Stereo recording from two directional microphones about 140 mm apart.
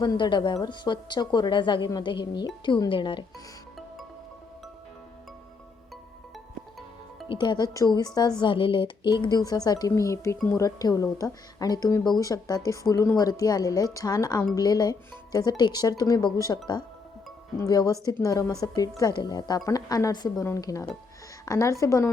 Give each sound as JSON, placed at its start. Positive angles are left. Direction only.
{"t": 0.0, "sound": "a woman's voice", "side_deg": 35}
{"t": 6.3, "sound": "music", "side_deg": 0}
{"t": 7.3, "sound": "speech", "side_deg": 35}
{"t": 17.6, "sound": "speech", "side_deg": 25}